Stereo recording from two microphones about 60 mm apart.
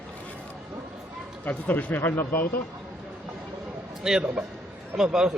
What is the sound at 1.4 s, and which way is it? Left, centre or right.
Speech, left.